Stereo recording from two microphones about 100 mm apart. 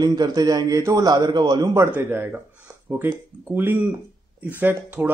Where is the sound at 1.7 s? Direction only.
25° right (ahead or behind).